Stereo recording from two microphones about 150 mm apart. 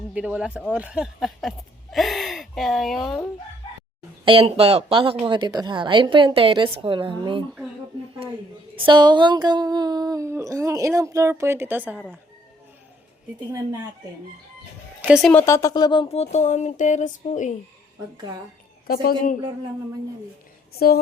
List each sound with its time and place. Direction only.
0.1 s speech: 5° right (ahead or behind)
0.7 s a sound: 10° right (ahead or behind)
4.3 s a woman's voice: 40° right (ahead or behind)
8.7 s a sound: 35° right (ahead or behind); by 12.0 s 10° right (ahead or behind)
15.0 s speech: 5° right (ahead or behind)
15.3 s speech: 15° left (ahead or behind); by 17.5 s 55° left (ahead or behind)
18.9 s a woman's voice: 80° left
20.7 s a woman's voice: 90° left